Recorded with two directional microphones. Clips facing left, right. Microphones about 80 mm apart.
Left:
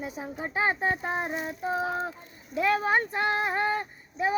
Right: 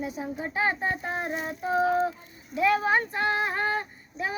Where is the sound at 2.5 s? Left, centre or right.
Left.